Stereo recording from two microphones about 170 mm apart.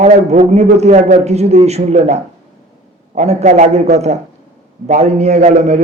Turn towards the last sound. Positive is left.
turn(degrees=-45)  # may be behind; listen again after turning